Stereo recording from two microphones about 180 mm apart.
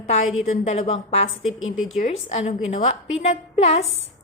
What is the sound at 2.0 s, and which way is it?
A woman's voice, 35° left (ahead or behind).